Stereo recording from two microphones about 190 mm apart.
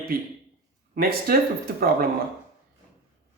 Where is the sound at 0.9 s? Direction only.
50° right (ahead or behind).